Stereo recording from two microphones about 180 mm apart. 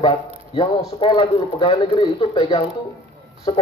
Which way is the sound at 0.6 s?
25° left (ahead or behind).